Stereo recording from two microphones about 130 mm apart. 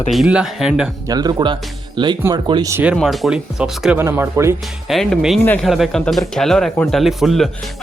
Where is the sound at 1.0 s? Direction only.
30° right (ahead or behind).